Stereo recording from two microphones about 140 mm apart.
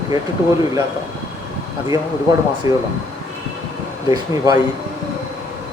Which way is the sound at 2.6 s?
25° right (ahead or behind).